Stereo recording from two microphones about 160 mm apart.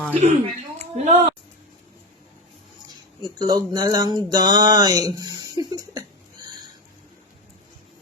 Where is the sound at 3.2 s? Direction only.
25° right (ahead or behind).